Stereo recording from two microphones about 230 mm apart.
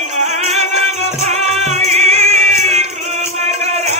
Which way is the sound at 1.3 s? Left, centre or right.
Right.